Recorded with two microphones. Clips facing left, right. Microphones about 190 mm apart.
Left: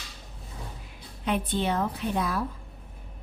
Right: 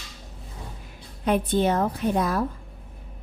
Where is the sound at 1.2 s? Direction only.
45° right (ahead or behind).